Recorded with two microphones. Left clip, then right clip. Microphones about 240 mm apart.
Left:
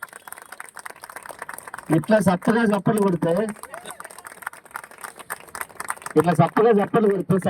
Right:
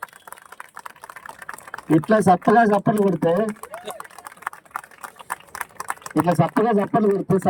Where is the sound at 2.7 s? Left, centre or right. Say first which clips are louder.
Right 2 dB; right.